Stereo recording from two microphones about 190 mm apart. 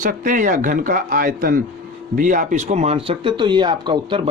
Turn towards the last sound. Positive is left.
turn(degrees=-25)  # may be behind; listen again after turning